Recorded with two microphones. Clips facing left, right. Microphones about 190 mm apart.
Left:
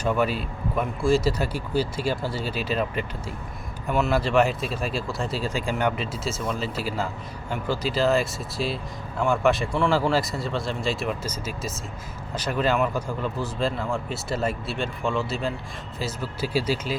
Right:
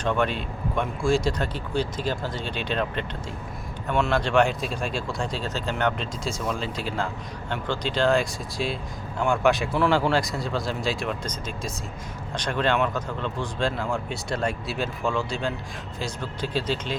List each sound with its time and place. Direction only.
0.0 s speech: 5° left (ahead or behind)